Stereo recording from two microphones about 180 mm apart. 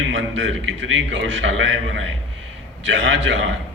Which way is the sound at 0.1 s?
90° right.